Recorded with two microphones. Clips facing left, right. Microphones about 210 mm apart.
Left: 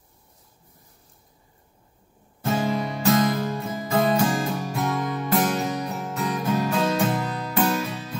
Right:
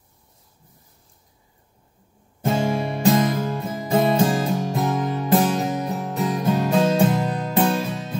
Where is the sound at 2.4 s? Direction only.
25° right (ahead or behind).